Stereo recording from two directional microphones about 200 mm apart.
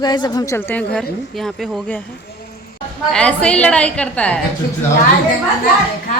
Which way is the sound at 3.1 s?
5° left (ahead or behind).